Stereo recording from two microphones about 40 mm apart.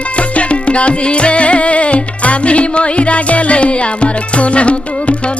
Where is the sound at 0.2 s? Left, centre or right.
Left.